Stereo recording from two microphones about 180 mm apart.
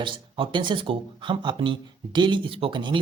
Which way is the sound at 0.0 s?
25° right (ahead or behind).